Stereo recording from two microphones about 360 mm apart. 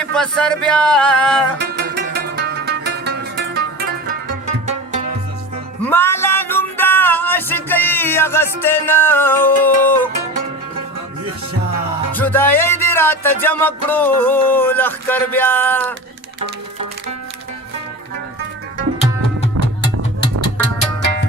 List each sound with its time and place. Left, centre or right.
0.0 s music: centre
1.5 s music: right
5.8 s music: centre
12.1 s music: centre